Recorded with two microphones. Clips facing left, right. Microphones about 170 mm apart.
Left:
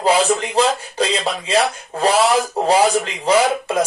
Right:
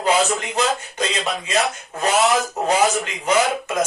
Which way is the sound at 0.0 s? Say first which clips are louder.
Left 3 dB; 30° left (ahead or behind).